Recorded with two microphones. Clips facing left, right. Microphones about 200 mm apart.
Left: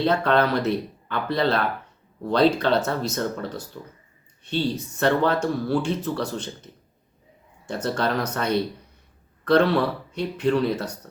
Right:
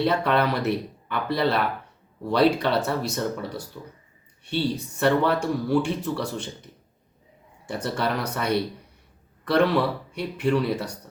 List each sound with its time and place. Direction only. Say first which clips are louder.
0.0 s speech: left 2 dB; 10° right (ahead or behind)
7.7 s a man's voice: left 2 dB; 10° right (ahead or behind)